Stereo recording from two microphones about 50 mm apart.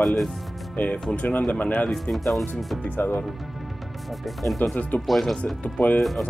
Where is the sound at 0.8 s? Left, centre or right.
Left.